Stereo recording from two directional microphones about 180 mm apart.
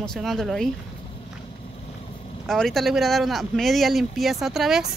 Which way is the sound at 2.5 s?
Centre (ahead or behind).